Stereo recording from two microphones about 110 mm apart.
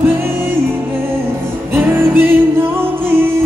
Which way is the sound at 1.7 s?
20° right (ahead or behind).